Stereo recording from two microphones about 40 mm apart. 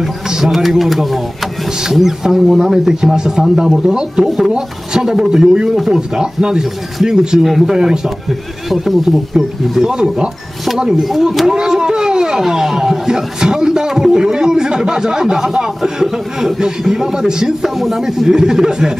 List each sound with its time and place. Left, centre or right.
0.5 s a man's voice: centre
7.4 s speech: centre
7.7 s a man's voice: centre
8.3 s speech: centre
9.8 s a man's voice: centre
11.0 s speech: centre
11.5 s a man's voice: centre
17.7 s speech: centre
18.0 s a man's voice: centre